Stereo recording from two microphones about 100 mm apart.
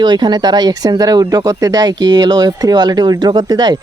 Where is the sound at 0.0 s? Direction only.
45° right (ahead or behind).